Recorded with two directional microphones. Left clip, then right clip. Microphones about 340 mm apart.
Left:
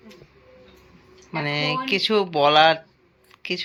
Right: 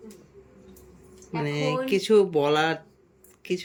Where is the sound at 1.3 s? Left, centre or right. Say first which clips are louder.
Left 3 dB; centre.